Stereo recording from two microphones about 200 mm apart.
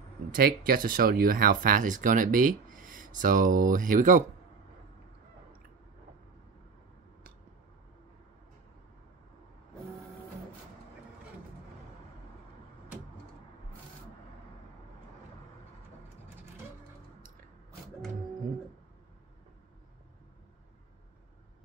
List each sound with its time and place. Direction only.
0.4 s speech: 45° right (ahead or behind)